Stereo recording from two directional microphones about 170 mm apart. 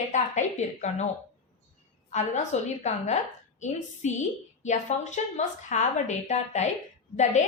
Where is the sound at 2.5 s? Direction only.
40° left (ahead or behind).